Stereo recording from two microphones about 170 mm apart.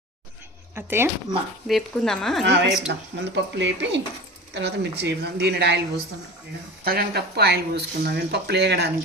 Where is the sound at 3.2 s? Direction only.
90° right.